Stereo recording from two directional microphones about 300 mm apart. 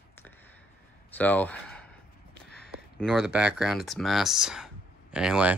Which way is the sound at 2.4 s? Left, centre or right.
Left.